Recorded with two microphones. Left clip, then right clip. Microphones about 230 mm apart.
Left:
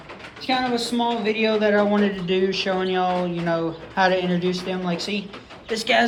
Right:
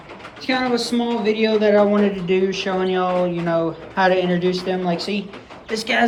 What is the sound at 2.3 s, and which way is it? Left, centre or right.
Speech, centre.